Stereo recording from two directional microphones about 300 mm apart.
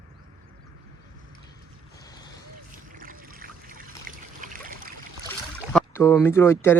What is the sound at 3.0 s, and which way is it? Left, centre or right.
Trickle, right.